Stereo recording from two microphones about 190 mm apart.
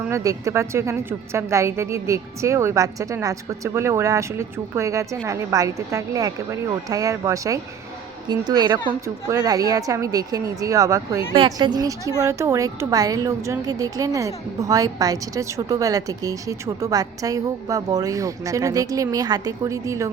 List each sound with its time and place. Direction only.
0.1 s a woman's voice: 15° right (ahead or behind)